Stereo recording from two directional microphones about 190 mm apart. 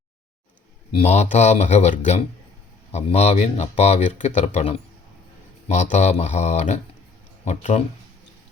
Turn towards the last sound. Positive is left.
turn(degrees=35)  # may be behind; listen again after turning